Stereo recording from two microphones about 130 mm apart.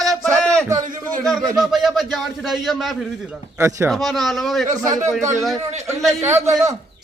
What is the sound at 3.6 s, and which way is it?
Speech, 20° right (ahead or behind).